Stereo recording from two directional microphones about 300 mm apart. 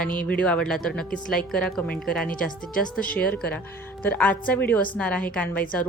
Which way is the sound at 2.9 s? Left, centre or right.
Centre.